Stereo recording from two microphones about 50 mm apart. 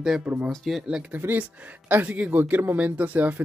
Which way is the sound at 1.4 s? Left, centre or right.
Right.